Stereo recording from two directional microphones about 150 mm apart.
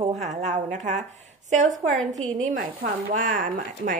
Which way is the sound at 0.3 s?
55° right (ahead or behind).